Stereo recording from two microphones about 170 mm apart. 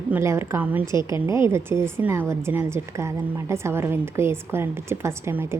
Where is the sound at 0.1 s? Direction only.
15° right (ahead or behind).